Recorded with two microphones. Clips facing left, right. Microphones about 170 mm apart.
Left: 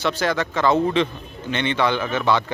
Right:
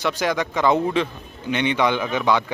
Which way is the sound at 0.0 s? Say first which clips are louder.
Even; 15° right (ahead or behind).